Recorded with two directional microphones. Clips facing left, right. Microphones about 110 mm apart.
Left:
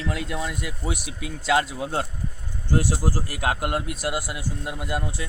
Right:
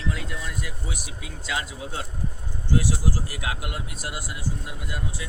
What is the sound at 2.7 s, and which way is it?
Speech, 50° left (ahead or behind).